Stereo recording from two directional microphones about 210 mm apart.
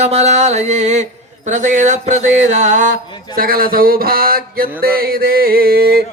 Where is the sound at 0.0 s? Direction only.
30° right (ahead or behind).